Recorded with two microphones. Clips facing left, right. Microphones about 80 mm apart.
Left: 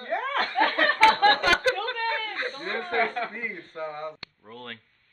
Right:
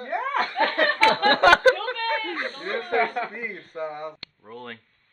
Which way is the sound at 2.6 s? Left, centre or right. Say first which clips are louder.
Right 3 dB; centre.